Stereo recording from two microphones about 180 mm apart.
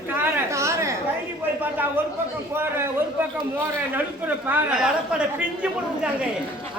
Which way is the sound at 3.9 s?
10° right (ahead or behind).